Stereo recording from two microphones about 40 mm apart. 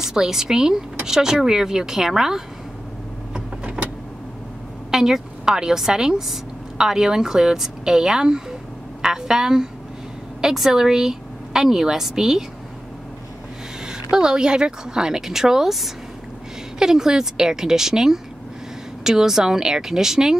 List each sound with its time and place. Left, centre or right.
0.0 s a woman's voice: centre
3.8 s vehicle: right
4.9 s a woman's voice: centre
13.8 s a woman's voice: centre